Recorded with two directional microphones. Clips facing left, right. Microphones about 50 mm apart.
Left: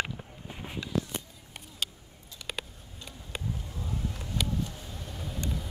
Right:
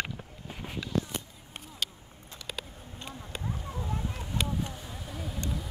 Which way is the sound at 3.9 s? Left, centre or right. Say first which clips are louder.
Left 1 dB; right.